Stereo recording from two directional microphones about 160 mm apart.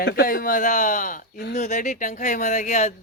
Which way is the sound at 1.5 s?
50° left (ahead or behind).